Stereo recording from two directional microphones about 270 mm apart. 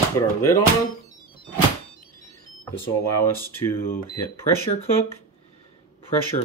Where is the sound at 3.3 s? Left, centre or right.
Centre.